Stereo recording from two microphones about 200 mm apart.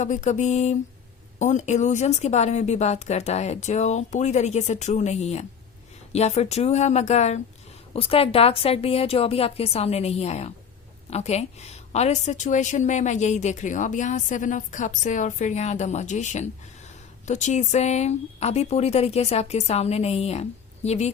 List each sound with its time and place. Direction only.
0.0 s a woman's voice: 35° left (ahead or behind)